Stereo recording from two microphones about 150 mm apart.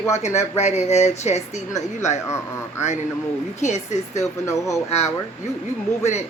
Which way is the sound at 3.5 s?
50° left (ahead or behind).